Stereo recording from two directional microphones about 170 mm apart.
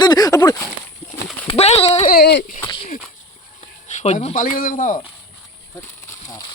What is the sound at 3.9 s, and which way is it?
Speech, 40° left (ahead or behind).